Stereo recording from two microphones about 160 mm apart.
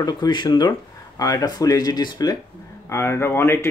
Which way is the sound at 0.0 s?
25° left (ahead or behind).